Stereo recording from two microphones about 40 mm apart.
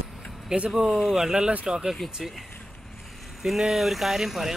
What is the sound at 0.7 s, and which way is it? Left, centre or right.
Speech, centre.